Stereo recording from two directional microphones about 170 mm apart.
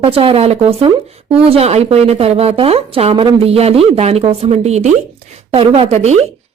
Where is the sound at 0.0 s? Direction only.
30° right (ahead or behind).